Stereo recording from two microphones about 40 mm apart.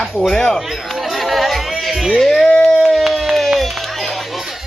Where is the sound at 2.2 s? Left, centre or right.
Centre.